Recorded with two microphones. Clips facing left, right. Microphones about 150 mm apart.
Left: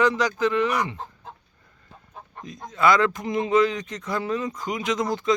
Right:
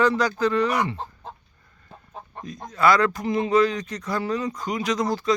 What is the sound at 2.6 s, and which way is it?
Speech, 20° left (ahead or behind).